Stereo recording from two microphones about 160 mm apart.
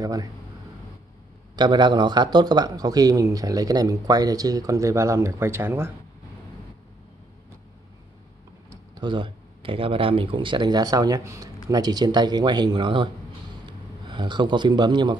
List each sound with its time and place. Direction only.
0.0 s a man's voice: 25° right (ahead or behind)
1.6 s a man's voice: 30° right (ahead or behind)
8.6 s speech: 25° right (ahead or behind)